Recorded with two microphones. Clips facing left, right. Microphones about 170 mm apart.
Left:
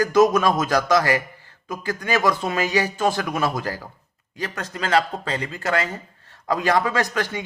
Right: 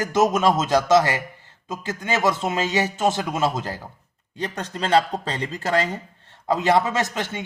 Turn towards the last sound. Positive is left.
turn(degrees=-20)  # may be behind; listen again after turning